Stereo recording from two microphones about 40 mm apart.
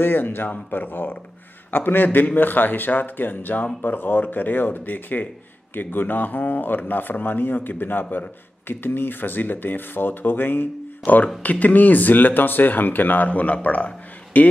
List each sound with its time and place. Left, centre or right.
0.0 s speech: left
11.1 s speech: left
13.3 s speech: left